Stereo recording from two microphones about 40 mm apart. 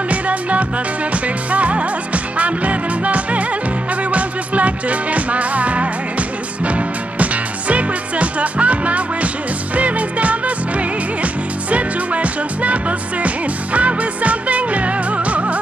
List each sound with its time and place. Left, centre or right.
0.1 s music: right